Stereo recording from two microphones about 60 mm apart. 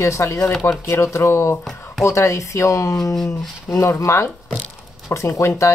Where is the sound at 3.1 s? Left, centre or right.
Centre.